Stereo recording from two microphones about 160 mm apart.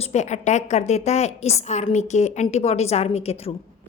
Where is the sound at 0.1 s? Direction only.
45° left (ahead or behind).